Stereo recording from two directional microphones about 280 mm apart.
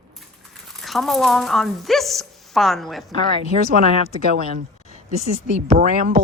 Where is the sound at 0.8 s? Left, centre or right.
Centre.